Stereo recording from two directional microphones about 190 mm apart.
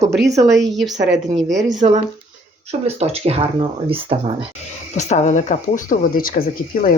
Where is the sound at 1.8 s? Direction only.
35° right (ahead or behind).